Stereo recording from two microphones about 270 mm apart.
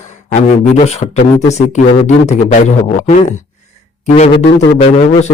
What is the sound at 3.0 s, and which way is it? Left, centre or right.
Speech, left.